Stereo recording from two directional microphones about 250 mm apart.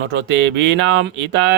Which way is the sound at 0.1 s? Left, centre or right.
Right.